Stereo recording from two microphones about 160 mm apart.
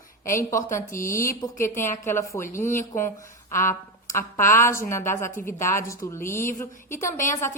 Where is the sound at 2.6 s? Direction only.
55° left (ahead or behind).